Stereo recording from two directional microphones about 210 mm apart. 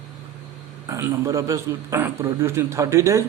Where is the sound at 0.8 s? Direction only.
15° right (ahead or behind).